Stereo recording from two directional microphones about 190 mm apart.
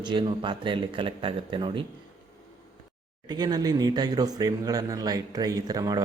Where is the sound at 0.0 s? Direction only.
25° right (ahead or behind).